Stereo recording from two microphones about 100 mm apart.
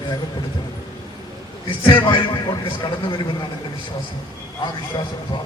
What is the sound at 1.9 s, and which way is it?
A man's voice, 55° left (ahead or behind).